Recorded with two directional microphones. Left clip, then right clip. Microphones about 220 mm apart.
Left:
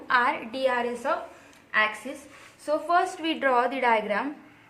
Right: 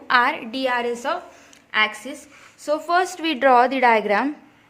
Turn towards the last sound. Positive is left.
turn(degrees=-45)  # may be behind; listen again after turning